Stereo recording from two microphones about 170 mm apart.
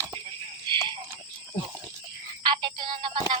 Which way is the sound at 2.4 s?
25° right (ahead or behind).